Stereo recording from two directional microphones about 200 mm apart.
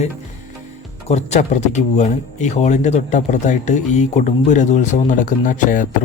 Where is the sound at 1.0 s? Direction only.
35° left (ahead or behind).